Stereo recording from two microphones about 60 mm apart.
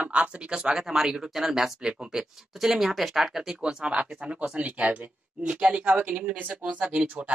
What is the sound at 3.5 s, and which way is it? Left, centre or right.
Speech, centre.